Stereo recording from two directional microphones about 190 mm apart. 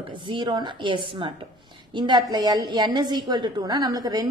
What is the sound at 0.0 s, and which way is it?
A woman's voice, 25° right (ahead or behind).